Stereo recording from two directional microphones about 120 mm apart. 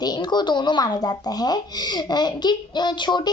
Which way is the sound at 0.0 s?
35° left (ahead or behind).